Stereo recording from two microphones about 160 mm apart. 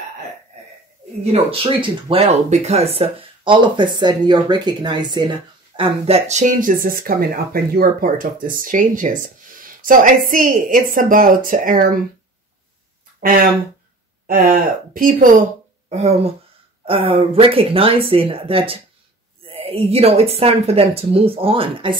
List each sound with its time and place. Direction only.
1.2 s speech: 40° right (ahead or behind)
3.0 s speech: 35° right (ahead or behind); by 12.0 s 60° right (ahead or behind)
13.2 s speech: 65° right (ahead or behind)
15.9 s speech: 40° right (ahead or behind)